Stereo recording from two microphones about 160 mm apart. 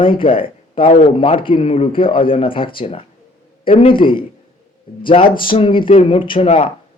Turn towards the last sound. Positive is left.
turn(degrees=40)  # may be behind; listen again after turning